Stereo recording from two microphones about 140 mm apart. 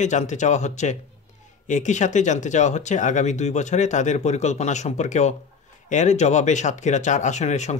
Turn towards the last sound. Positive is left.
turn(degrees=55)  # may be behind; listen again after turning